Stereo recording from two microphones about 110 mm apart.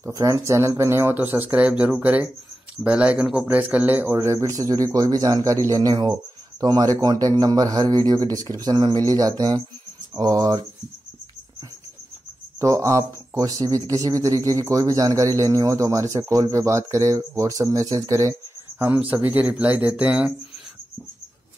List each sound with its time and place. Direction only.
0.0 s a man's voice: 25° right (ahead or behind)
12.5 s a man's voice: 30° right (ahead or behind)
18.8 s speech: 15° right (ahead or behind)